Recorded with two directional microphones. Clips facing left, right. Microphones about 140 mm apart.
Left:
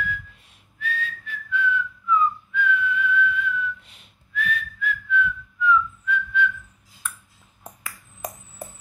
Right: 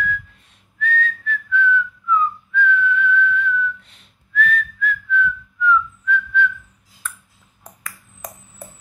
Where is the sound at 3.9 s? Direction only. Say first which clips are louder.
Right 6 dB; 5° left (ahead or behind).